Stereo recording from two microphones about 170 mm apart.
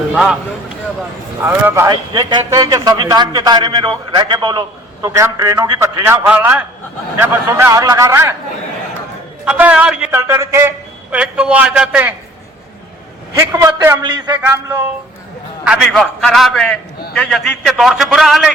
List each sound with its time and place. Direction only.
0.1 s speech: 5° right (ahead or behind)
1.4 s a man's voice: 10° right (ahead or behind)
1.9 s a man's voice: 25° right (ahead or behind)
9.4 s a man's voice: 5° right (ahead or behind)
13.5 s a man's voice: 15° right (ahead or behind)
15.6 s a man's voice: 5° right (ahead or behind)